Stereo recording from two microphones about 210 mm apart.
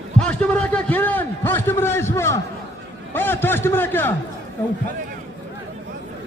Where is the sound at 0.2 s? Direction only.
5° left (ahead or behind).